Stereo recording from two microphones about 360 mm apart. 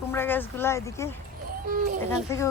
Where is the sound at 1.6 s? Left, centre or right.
Right.